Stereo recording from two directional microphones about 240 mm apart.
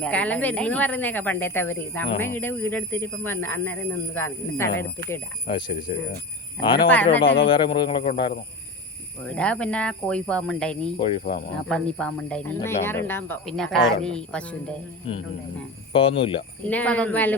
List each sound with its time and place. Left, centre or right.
0.0 s a man's voice: centre
7.2 s speech: left
7.4 s speech: centre
9.2 s speech: centre
11.0 s speech: left
11.7 s speech: centre
15.9 s speech: left
16.6 s a man's voice: centre